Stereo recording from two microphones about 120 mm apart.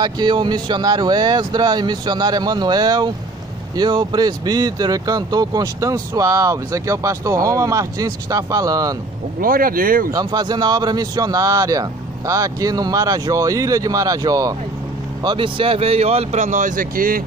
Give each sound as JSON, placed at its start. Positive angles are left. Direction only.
{"t": 0.0, "sound": "a man's voice", "side_deg": -40}
{"t": 10.1, "sound": "a man's voice", "side_deg": -35}
{"t": 15.2, "sound": "speech", "side_deg": -45}